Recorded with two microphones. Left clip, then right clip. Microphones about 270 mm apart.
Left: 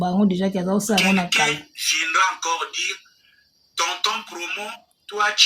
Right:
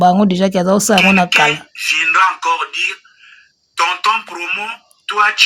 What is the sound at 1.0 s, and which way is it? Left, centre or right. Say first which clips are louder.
Speech: right 7 dB; centre.